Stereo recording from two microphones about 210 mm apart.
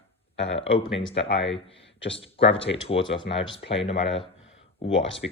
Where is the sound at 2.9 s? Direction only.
25° left (ahead or behind).